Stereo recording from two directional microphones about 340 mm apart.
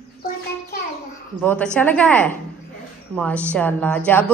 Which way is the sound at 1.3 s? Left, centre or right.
Centre.